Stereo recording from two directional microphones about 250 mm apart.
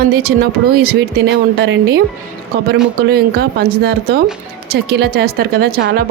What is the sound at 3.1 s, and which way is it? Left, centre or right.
Speech, right.